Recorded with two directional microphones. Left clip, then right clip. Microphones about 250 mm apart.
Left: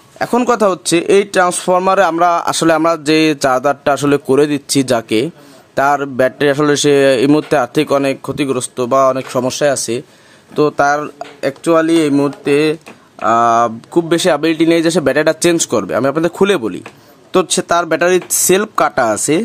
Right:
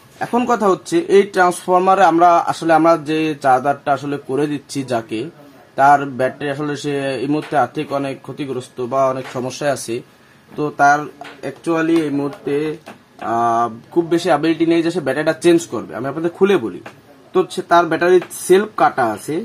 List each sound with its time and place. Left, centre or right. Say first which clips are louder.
0.2 s speech: left 4 dB; left